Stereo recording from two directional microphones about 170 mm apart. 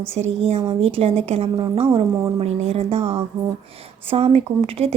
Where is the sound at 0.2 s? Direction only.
35° right (ahead or behind).